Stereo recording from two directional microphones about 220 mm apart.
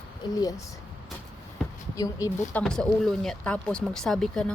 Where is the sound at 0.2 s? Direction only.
15° left (ahead or behind).